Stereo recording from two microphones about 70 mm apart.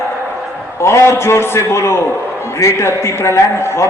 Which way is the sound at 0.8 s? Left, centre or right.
Left.